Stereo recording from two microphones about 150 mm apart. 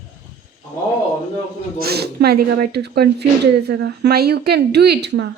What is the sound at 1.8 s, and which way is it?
Speech, 90° right.